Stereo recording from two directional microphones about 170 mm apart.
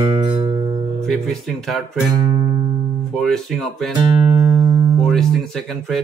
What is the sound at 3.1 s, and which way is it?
Speech, centre (ahead or behind).